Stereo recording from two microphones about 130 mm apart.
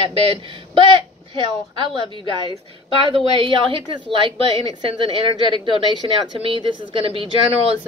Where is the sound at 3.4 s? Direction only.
40° right (ahead or behind).